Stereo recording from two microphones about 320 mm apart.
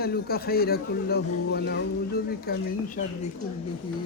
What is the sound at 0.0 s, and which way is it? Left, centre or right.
Speech, left.